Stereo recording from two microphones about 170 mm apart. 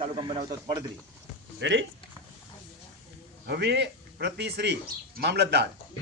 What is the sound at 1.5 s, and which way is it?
Speech, 90° right.